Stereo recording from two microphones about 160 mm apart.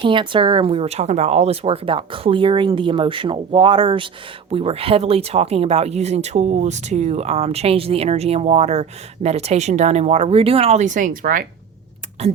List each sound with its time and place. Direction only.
0.0 s speech: 30° right (ahead or behind); by 11.4 s 60° right (ahead or behind)
12.2 s speech: 40° right (ahead or behind)